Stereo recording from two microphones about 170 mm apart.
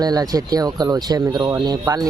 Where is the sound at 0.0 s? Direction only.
20° right (ahead or behind).